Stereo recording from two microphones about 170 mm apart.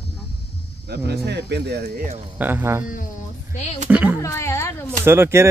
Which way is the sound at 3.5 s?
40° left (ahead or behind).